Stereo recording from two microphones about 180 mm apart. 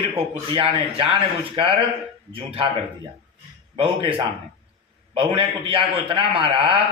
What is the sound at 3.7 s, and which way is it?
A man's voice, 30° right (ahead or behind).